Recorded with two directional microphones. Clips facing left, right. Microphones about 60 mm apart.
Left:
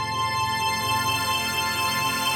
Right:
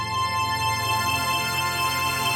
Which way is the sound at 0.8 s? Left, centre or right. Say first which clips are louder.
Even; right.